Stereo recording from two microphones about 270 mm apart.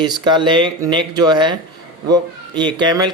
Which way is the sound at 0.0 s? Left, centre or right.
Centre.